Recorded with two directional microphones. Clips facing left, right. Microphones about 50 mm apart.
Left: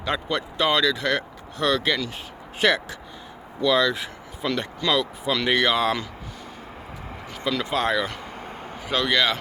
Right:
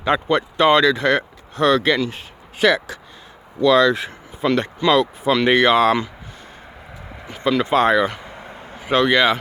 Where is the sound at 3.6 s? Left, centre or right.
Right.